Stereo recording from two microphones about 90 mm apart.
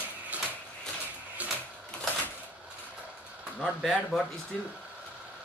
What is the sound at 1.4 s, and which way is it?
Sewing machine, 15° right (ahead or behind).